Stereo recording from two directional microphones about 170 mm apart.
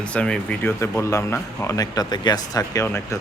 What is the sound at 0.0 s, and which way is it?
Speech, 5° left (ahead or behind).